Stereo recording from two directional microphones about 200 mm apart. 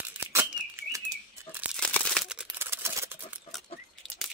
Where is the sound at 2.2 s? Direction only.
10° right (ahead or behind).